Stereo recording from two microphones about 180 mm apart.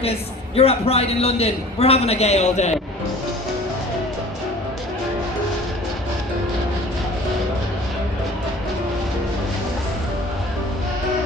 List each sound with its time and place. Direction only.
0.0 s a man's voice: 35° left (ahead or behind)